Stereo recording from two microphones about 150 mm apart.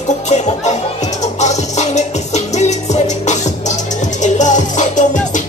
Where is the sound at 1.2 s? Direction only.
50° left (ahead or behind).